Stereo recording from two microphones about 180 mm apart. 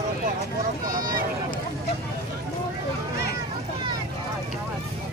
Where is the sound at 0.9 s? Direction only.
20° right (ahead or behind).